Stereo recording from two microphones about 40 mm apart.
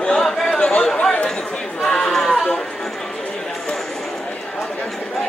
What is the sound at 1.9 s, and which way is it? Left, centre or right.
Chatter, centre.